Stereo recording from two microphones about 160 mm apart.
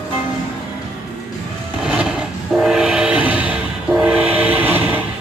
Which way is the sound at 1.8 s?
5° right (ahead or behind).